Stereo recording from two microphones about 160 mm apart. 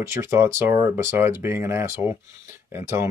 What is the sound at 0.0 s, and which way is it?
Speech, 15° right (ahead or behind).